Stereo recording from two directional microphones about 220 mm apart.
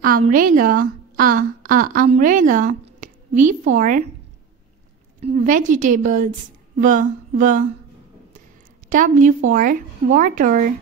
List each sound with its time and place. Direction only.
0.0 s a woman's voice: 40° right (ahead or behind)
5.2 s speech: 35° right (ahead or behind)
8.8 s a woman's voice: 35° right (ahead or behind)